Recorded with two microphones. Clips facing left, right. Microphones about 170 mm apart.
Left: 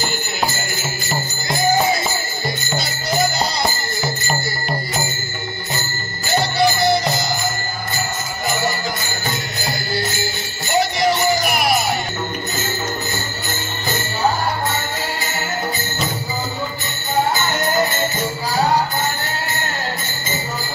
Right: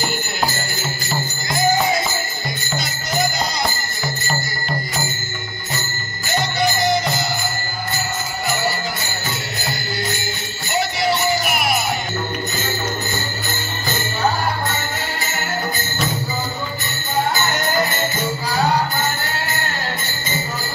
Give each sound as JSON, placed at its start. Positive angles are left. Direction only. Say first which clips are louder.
{"t": 6.3, "sound": "music", "louder": "left 3 dB", "side_deg": 35}
{"t": 11.0, "sound": "music", "louder": "left 2 dB", "side_deg": 40}